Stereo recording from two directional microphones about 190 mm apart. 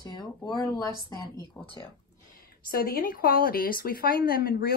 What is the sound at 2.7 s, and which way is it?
A woman's voice, 50° left (ahead or behind).